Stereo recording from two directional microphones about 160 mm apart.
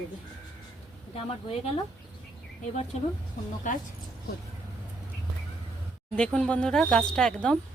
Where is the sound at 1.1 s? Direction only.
40° left (ahead or behind).